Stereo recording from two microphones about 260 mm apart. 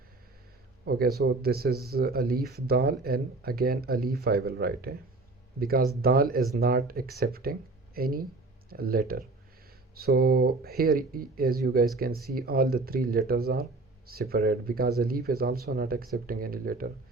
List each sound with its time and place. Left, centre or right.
0.9 s speech: right